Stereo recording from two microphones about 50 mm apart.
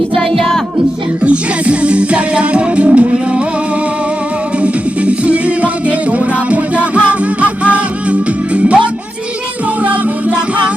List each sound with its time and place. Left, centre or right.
1.2 s music: right
4.6 s music: right
9.8 s music: right